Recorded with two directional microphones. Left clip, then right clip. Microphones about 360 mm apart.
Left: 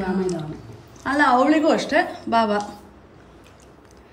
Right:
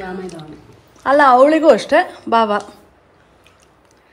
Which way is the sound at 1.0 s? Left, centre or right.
Centre.